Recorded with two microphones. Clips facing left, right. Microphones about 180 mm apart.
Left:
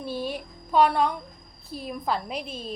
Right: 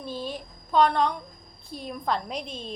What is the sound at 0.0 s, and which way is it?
A woman's voice, 10° left (ahead or behind).